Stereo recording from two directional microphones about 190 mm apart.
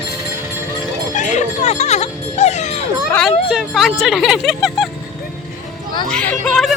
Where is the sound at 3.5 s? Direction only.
Centre (ahead or behind).